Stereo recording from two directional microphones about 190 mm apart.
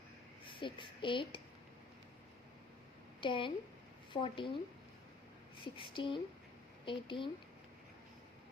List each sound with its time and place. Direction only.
0.4 s speech: 25° left (ahead or behind)
3.2 s a woman's voice: 25° left (ahead or behind)
5.6 s speech: 25° left (ahead or behind)